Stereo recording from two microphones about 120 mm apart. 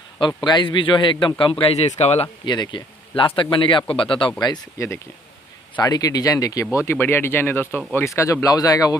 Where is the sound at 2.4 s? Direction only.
40° left (ahead or behind).